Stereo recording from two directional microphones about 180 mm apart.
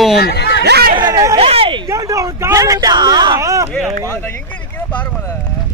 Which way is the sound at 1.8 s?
15° right (ahead or behind).